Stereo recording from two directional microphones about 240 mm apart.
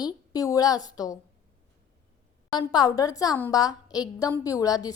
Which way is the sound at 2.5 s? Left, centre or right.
Centre.